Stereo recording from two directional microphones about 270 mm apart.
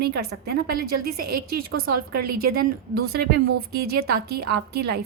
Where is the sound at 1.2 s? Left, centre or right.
Right.